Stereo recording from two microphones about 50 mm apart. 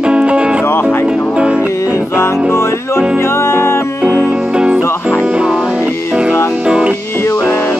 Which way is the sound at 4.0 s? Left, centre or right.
Right.